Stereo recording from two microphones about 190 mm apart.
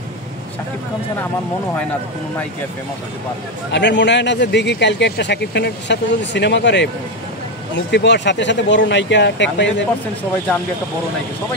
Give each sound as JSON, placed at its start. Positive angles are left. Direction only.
{"t": 3.7, "sound": "speech", "side_deg": 65}